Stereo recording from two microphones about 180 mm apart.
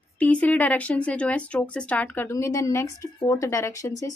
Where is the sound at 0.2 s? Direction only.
10° left (ahead or behind).